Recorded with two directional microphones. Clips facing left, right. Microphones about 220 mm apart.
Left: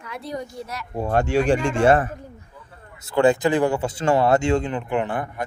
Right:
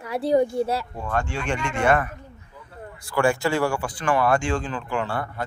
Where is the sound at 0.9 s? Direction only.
40° left (ahead or behind).